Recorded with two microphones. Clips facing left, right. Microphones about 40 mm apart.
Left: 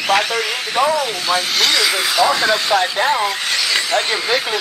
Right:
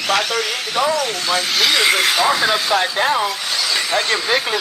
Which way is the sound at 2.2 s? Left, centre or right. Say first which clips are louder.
Left 1 dB; centre.